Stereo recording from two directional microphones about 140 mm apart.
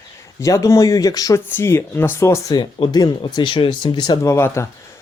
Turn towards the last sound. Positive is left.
turn(degrees=20)  # may be behind; listen again after turning